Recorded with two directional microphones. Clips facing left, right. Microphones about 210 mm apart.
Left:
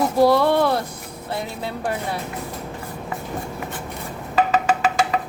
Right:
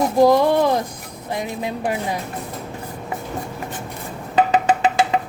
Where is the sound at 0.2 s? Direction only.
15° right (ahead or behind).